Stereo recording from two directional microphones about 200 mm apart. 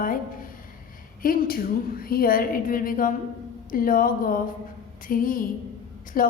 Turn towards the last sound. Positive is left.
turn(degrees=45)  # may be behind; listen again after turning